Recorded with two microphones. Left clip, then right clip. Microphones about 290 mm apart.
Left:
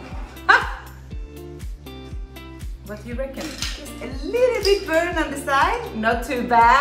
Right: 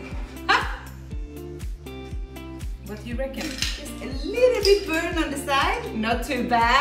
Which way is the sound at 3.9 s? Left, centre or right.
Centre.